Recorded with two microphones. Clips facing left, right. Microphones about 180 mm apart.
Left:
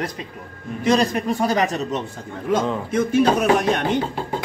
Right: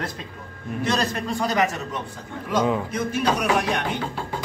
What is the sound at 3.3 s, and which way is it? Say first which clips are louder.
Speech: left 5 dB; 45° left (ahead or behind).